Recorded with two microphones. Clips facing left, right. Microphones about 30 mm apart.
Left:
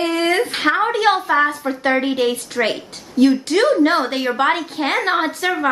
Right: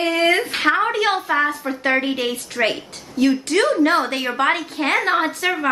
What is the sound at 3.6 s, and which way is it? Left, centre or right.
Speech, left.